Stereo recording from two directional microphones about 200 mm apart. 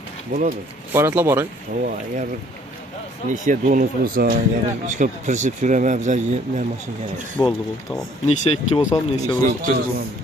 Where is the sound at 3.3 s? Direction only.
40° right (ahead or behind).